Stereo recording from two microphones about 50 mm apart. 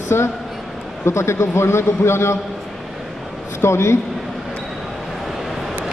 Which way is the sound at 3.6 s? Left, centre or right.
Left.